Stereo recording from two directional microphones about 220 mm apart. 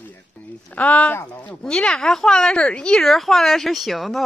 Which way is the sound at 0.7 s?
5° left (ahead or behind).